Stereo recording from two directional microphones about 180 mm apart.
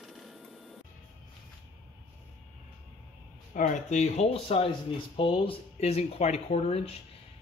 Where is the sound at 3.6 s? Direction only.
45° left (ahead or behind).